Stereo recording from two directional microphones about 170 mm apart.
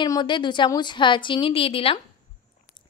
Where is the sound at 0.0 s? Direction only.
25° left (ahead or behind).